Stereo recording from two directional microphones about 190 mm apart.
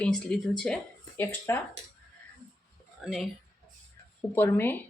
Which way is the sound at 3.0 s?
Centre (ahead or behind).